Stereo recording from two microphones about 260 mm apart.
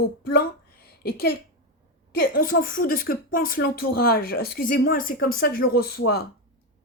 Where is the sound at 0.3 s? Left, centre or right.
Left.